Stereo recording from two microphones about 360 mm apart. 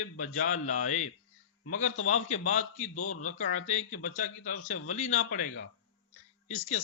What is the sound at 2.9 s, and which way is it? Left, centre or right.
Speech, left.